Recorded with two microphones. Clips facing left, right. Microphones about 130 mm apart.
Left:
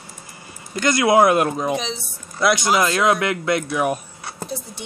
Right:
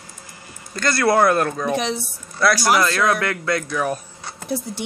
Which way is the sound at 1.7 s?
65° right (ahead or behind).